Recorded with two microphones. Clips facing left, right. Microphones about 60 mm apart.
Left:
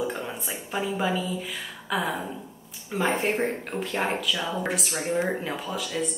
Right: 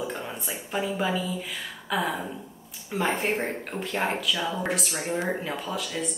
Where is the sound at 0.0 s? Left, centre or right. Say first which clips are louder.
Left 2 dB; centre.